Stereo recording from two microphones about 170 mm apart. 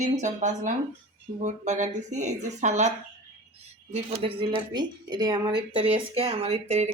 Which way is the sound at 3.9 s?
35° right (ahead or behind).